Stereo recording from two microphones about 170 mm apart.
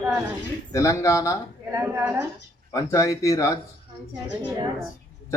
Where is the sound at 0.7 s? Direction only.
20° left (ahead or behind).